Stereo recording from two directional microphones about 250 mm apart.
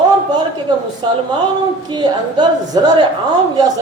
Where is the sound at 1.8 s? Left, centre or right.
Centre.